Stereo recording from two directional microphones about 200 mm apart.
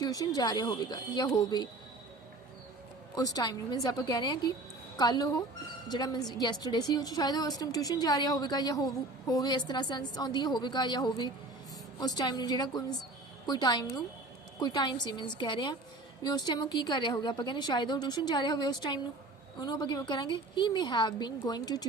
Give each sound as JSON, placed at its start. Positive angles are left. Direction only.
{"t": 0.0, "sound": "a woman's voice", "side_deg": 20}
{"t": 3.2, "sound": "a woman's voice", "side_deg": 20}